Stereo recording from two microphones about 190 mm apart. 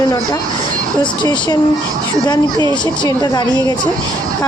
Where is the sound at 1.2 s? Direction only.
25° left (ahead or behind).